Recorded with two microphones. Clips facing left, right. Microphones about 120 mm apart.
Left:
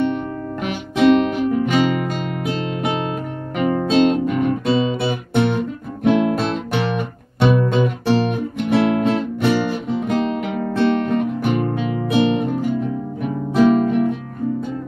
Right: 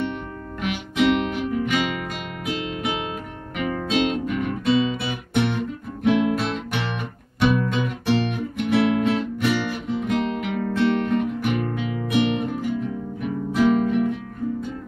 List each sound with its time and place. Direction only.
0.0 s music: 35° left (ahead or behind)